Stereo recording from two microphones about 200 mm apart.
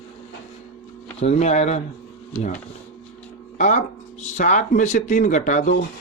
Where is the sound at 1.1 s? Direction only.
35° left (ahead or behind).